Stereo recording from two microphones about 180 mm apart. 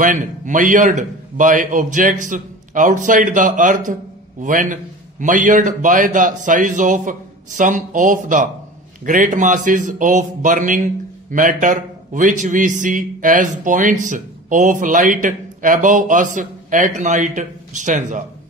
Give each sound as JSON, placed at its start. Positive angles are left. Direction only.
{"t": 0.0, "sound": "a man's voice", "side_deg": -45}